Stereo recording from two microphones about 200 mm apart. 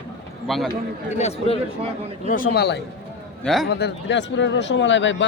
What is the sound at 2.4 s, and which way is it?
Speech, 55° left (ahead or behind).